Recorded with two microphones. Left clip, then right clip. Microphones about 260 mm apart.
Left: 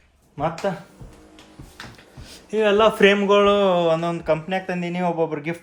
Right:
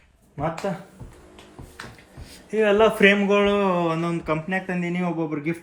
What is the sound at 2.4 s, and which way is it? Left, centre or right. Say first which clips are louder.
Speech: left 1 dB; centre.